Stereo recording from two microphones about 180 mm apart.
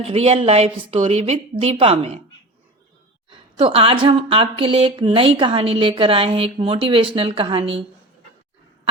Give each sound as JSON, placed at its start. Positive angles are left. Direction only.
{"t": 0.0, "sound": "a woman's voice", "side_deg": -35}
{"t": 3.2, "sound": "a woman's voice", "side_deg": -30}